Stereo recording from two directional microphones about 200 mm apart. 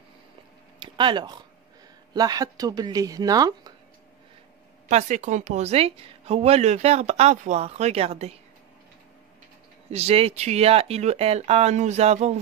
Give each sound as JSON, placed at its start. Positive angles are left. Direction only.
{"t": 0.7, "sound": "speech", "side_deg": -25}
{"t": 4.8, "sound": "a woman's voice", "side_deg": -35}
{"t": 9.8, "sound": "a woman's voice", "side_deg": -30}